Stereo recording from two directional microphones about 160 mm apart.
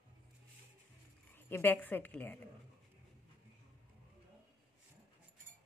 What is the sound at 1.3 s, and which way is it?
A woman's voice, 15° left (ahead or behind).